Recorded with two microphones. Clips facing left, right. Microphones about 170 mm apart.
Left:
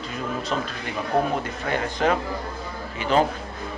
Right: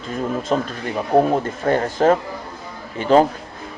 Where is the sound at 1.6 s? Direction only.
45° right (ahead or behind).